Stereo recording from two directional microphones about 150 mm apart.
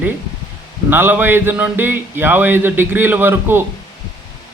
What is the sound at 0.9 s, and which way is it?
A man's voice, 15° right (ahead or behind).